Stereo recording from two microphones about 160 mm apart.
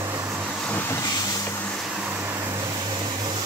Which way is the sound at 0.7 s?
10° left (ahead or behind).